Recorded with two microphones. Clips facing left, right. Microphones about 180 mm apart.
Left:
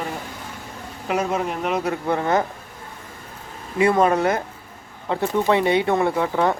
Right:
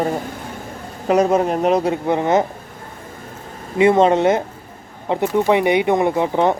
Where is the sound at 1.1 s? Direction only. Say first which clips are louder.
Right 8 dB; 40° right (ahead or behind); by 2.5 s 20° right (ahead or behind).